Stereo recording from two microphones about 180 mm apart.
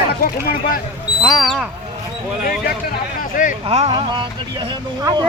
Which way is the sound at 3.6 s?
35° right (ahead or behind).